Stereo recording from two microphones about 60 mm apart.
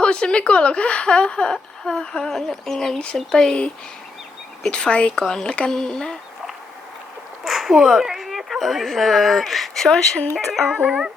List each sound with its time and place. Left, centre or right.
0.0 s a woman's voice: centre
3.3 s speech: centre
4.7 s speech: centre
7.4 s speech: centre
10.3 s speech: centre
10.8 s music: centre